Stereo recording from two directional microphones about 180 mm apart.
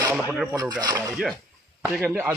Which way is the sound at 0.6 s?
20° right (ahead or behind).